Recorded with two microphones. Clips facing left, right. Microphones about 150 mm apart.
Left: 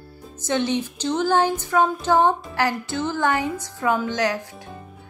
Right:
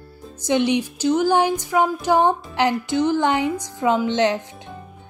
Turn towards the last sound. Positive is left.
turn(degrees=-25)  # may be behind; listen again after turning